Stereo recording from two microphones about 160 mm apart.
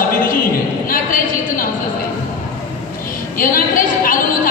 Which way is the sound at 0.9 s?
60° left (ahead or behind).